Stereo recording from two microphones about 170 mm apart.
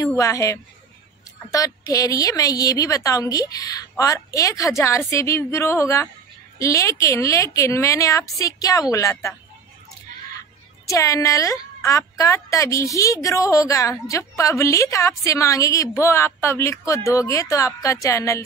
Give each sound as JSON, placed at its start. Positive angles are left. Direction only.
{"t": 0.0, "sound": "a woman's voice", "side_deg": 20}
{"t": 10.9, "sound": "a woman's voice", "side_deg": 20}